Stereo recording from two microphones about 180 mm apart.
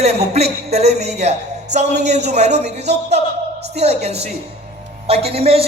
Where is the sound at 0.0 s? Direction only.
35° right (ahead or behind).